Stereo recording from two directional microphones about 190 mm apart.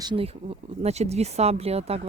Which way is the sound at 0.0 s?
25° right (ahead or behind).